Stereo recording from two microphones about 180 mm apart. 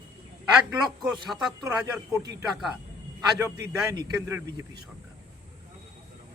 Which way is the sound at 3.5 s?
20° right (ahead or behind).